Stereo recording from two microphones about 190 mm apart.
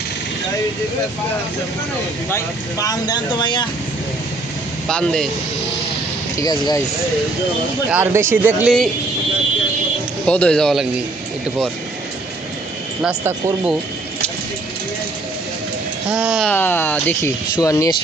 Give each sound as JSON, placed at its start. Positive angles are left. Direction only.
{"t": 2.3, "sound": "speech", "side_deg": 15}
{"t": 4.9, "sound": "speech", "side_deg": 5}
{"t": 6.3, "sound": "speech", "side_deg": 20}
{"t": 7.9, "sound": "speech", "side_deg": -10}
{"t": 8.6, "sound": "speech", "side_deg": 0}
{"t": 10.2, "sound": "speech", "side_deg": 5}
{"t": 13.0, "sound": "speech", "side_deg": -5}
{"t": 16.1, "sound": "speech", "side_deg": -5}
{"t": 16.5, "sound": "speech", "side_deg": 10}